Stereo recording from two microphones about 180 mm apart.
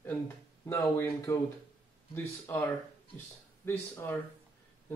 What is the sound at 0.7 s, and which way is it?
Speech, 15° left (ahead or behind).